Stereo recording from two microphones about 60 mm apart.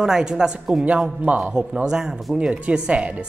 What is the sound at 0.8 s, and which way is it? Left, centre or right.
Speech, right.